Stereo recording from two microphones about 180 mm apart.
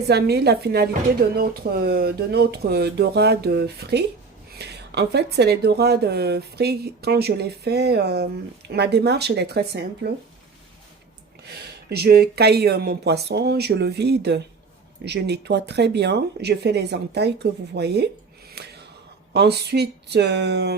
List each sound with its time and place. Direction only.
0.1 s speech: 65° right (ahead or behind)
11.4 s speech: 60° right (ahead or behind)
18.5 s a sound: 65° right (ahead or behind)
19.3 s speech: 65° right (ahead or behind)